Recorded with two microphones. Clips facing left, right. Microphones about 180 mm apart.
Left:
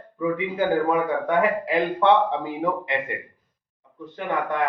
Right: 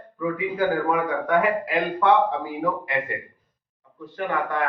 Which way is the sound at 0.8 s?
25° left (ahead or behind).